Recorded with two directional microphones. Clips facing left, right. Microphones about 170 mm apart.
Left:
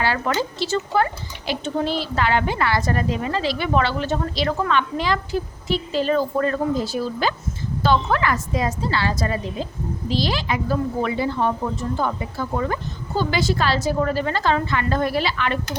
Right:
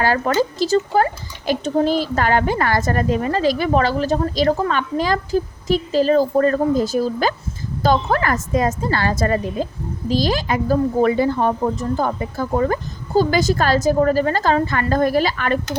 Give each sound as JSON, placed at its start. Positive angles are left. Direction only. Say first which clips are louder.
{"t": 0.0, "sound": "speech", "louder": "right 5 dB", "side_deg": -45}